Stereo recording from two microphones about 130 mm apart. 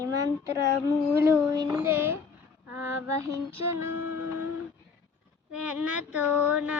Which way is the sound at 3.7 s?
20° right (ahead or behind).